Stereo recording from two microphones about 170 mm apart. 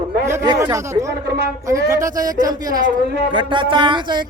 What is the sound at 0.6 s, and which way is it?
A man's voice, 15° right (ahead or behind).